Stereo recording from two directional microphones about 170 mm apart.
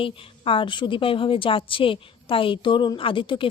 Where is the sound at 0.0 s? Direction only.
30° left (ahead or behind).